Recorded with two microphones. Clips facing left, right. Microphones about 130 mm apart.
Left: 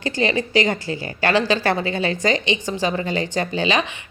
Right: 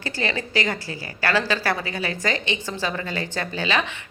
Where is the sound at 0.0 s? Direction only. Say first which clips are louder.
Left 6 dB; 20° left (ahead or behind).